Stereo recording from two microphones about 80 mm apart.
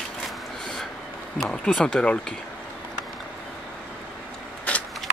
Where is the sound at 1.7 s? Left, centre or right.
Centre.